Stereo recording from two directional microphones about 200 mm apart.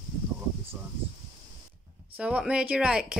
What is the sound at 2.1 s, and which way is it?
Speech, 5° right (ahead or behind).